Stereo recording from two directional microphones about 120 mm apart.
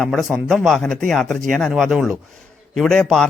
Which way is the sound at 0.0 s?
Centre (ahead or behind).